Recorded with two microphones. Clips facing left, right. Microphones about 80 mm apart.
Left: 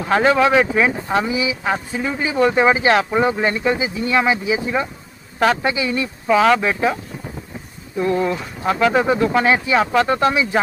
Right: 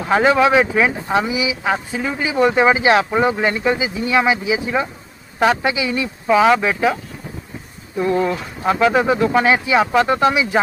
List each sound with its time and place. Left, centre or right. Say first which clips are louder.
0.0 s speech: right 1 dB; centre
8.2 s speech: right 1 dB; centre